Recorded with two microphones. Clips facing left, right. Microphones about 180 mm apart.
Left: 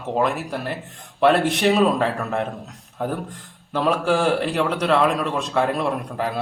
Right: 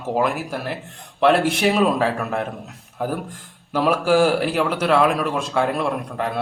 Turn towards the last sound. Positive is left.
turn(degrees=0)  # may be behind; listen again after turning